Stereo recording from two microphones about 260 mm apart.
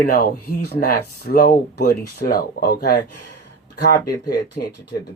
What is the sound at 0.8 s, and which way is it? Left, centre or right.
Speech, left.